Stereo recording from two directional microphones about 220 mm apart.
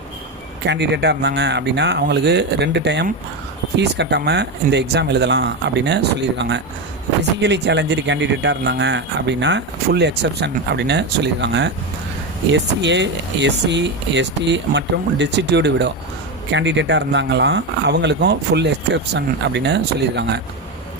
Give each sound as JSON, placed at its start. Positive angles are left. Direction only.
{"t": 0.6, "sound": "speech", "side_deg": -50}